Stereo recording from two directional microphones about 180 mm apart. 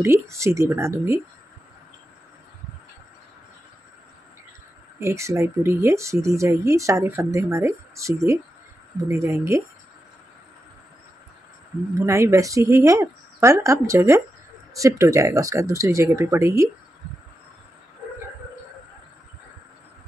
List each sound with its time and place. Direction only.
0.0 s speech: 15° right (ahead or behind)
4.9 s speech: 15° right (ahead or behind)
12.1 s speech: 15° right (ahead or behind)